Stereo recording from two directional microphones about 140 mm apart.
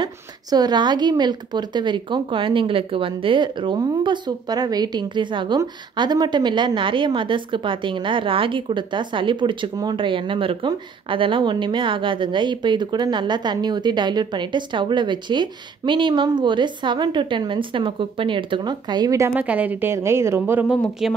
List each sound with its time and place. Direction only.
0.0 s a woman's voice: 30° right (ahead or behind)
19.3 s a woman's voice: 10° right (ahead or behind)
20.6 s speech: centre (ahead or behind)